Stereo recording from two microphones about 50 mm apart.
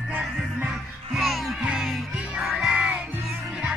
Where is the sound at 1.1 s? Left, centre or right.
Centre.